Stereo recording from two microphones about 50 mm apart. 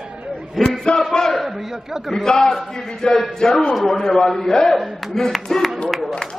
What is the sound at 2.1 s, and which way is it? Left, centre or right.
A man's voice, centre.